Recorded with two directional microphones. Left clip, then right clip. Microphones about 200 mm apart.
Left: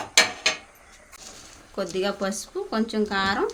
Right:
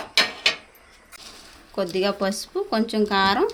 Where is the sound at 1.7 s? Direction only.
20° right (ahead or behind).